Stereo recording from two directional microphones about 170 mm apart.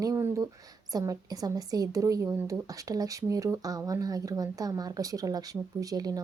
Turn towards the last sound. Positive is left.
turn(degrees=-20)  # may be behind; listen again after turning